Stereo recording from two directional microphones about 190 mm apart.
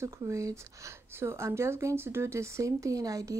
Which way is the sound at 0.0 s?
15° right (ahead or behind).